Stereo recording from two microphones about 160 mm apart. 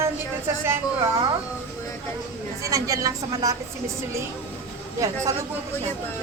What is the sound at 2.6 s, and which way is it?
Speech, 20° right (ahead or behind).